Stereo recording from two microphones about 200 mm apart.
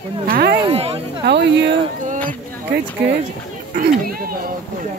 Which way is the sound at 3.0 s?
60° right (ahead or behind).